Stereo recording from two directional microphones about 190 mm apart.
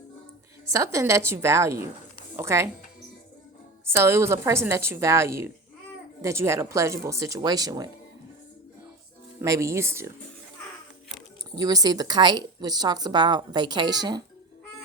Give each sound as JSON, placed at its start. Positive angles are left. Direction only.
{"t": 0.7, "sound": "a woman's voice", "side_deg": -15}
{"t": 3.8, "sound": "a woman's voice", "side_deg": -15}
{"t": 9.4, "sound": "a woman's voice", "side_deg": -15}
{"t": 11.5, "sound": "speech", "side_deg": -20}